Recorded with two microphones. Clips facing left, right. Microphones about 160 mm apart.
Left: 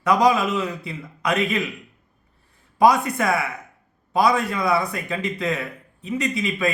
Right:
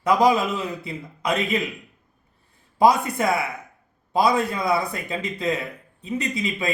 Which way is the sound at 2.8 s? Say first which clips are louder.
Left 1 dB; 25° right (ahead or behind).